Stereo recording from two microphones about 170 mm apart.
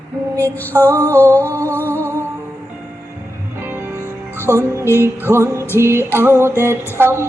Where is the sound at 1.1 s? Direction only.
10° left (ahead or behind).